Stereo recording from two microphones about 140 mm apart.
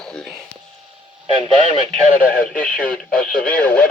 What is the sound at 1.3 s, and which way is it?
Speech, 35° right (ahead or behind).